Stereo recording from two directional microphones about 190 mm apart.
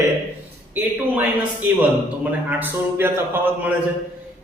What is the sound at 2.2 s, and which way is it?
A man's voice, 10° right (ahead or behind).